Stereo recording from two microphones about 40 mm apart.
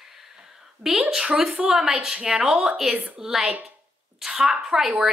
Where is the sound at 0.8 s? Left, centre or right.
Right.